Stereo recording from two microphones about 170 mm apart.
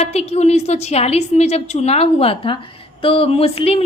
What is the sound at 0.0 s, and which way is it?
A woman's voice, 40° left (ahead or behind).